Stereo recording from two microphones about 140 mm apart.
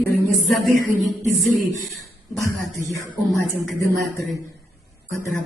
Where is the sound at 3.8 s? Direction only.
20° left (ahead or behind).